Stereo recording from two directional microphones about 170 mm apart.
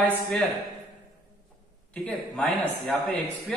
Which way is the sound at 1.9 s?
5° left (ahead or behind).